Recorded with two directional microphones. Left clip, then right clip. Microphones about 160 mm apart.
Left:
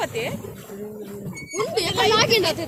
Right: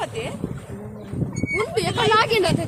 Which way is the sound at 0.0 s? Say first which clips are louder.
Left 2 dB; 20° left (ahead or behind).